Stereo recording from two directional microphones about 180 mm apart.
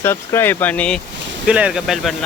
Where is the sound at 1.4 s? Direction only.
5° right (ahead or behind).